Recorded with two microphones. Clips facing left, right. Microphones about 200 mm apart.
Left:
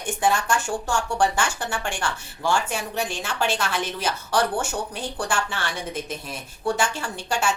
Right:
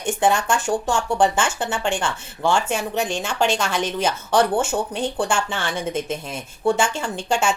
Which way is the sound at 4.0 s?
25° right (ahead or behind).